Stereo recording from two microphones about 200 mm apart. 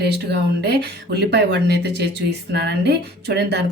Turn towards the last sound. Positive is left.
turn(degrees=-55)  # may be behind; listen again after turning